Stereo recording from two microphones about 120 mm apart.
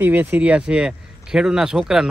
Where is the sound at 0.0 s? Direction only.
15° right (ahead or behind).